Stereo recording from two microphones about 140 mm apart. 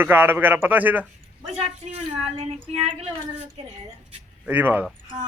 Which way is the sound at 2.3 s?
45° right (ahead or behind).